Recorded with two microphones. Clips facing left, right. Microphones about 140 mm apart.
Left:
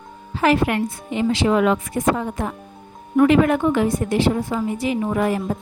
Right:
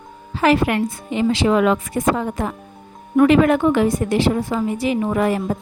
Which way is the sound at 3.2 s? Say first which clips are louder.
Right 2 dB; 80° right.